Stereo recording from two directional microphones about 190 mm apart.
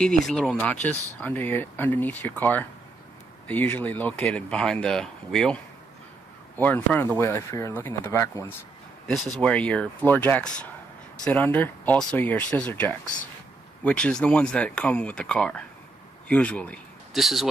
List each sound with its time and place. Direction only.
0.0 s speech: 5° left (ahead or behind)
6.6 s speech: 10° left (ahead or behind)
9.0 s speech: centre (ahead or behind)